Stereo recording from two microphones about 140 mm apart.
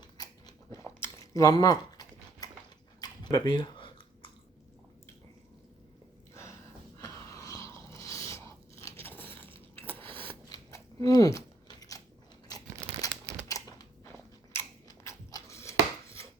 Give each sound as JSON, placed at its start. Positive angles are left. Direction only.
{"t": 0.0, "sound": "biting", "side_deg": 30}
{"t": 0.9, "sound": "a sound", "side_deg": 20}
{"t": 3.0, "sound": "chewing", "side_deg": 30}
{"t": 6.3, "sound": "gasp", "side_deg": 20}
{"t": 7.0, "sound": "biting", "side_deg": 25}
{"t": 9.0, "sound": "a sound", "side_deg": 15}
{"t": 10.5, "sound": "crunch", "side_deg": 25}
{"t": 13.5, "sound": "a sound", "side_deg": 25}
{"t": 14.5, "sound": "chopping", "side_deg": 20}